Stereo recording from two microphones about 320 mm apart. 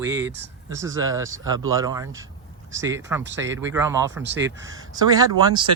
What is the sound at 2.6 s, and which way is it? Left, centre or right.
Speech, right.